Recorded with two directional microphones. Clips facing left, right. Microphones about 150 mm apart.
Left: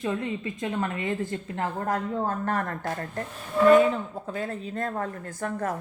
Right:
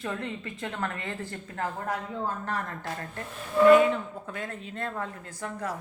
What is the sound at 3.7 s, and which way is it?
Speech, 35° left (ahead or behind).